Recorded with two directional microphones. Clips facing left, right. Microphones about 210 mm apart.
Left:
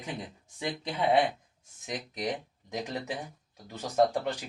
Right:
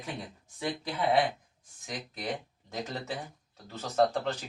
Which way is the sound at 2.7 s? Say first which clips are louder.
Left 2 dB; 15° left (ahead or behind).